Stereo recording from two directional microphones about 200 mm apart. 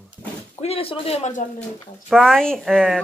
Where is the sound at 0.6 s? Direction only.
30° left (ahead or behind).